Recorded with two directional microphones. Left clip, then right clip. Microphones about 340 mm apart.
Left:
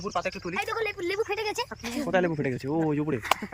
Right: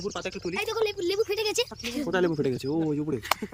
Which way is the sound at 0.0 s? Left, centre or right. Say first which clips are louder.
Left 2 dB; centre.